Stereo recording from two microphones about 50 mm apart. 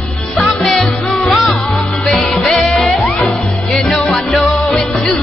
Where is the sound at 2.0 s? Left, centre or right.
Centre.